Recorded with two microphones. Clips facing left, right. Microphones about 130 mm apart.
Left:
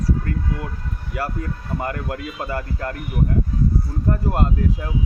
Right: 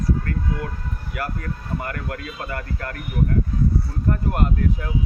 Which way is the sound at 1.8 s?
25° left (ahead or behind).